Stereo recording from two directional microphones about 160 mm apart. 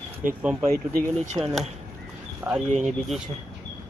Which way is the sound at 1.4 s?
30° right (ahead or behind).